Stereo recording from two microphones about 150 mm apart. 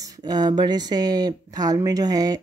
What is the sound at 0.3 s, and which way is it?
Speech, 30° right (ahead or behind).